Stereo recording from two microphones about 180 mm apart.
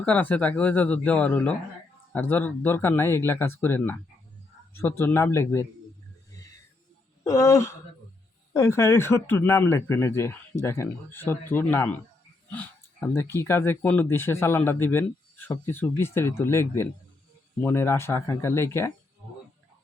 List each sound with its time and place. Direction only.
0.0 s speech: 10° left (ahead or behind)
7.3 s speech: 15° left (ahead or behind)